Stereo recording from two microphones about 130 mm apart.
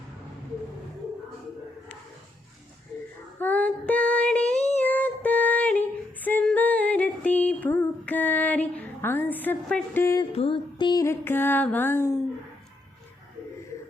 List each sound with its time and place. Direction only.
3.3 s female singing: 15° left (ahead or behind)
10.0 s music: 20° left (ahead or behind)
10.3 s a sound: 45° left (ahead or behind)
11.0 s music: 20° left (ahead or behind)